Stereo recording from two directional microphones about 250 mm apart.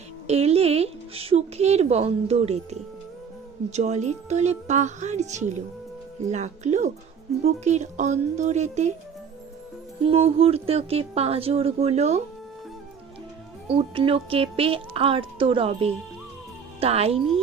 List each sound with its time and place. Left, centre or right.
0.3 s speech: right
10.0 s speech: right
13.7 s speech: right